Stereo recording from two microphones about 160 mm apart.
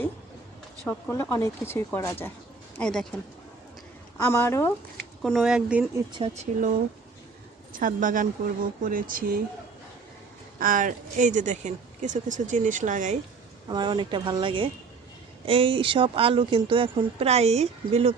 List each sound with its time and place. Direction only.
0.9 s speech: 10° left (ahead or behind)
2.7 s speech: 5° left (ahead or behind)
4.2 s speech: 15° left (ahead or behind)
5.2 s speech: centre (ahead or behind)
6.1 s speech: 30° right (ahead or behind)
6.3 s speech: 50° right (ahead or behind)
10.6 s speech: 60° right (ahead or behind)
13.7 s speech: 30° right (ahead or behind)